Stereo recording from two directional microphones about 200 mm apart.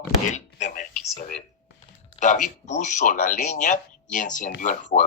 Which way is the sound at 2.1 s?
40° left (ahead or behind).